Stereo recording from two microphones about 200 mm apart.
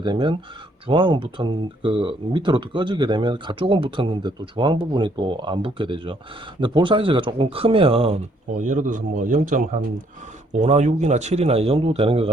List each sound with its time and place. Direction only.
0.0 s speech: 25° right (ahead or behind)